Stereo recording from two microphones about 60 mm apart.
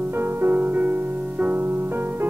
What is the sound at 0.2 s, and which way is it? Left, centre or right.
Music, right.